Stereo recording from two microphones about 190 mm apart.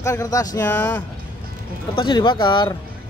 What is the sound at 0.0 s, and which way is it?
Speech, 15° left (ahead or behind).